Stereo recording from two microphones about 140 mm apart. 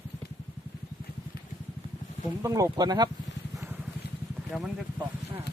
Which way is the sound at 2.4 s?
25° right (ahead or behind).